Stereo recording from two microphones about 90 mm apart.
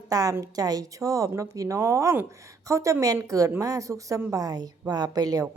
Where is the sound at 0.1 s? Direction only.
40° right (ahead or behind).